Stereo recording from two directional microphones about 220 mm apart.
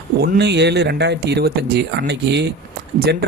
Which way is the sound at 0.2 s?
50° right (ahead or behind).